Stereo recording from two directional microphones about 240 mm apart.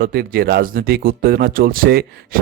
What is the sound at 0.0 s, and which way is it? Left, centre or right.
Speech, right.